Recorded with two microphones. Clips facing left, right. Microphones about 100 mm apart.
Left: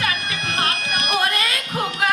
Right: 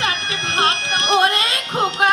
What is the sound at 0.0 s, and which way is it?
Music, 25° right (ahead or behind).